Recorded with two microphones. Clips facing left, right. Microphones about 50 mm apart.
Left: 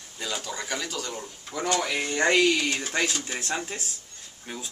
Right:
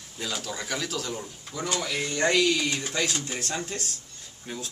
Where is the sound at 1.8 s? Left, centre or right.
Left.